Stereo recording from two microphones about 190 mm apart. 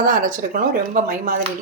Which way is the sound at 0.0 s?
45° right (ahead or behind).